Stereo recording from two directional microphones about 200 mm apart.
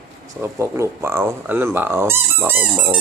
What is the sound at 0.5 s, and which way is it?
Speech, 15° right (ahead or behind).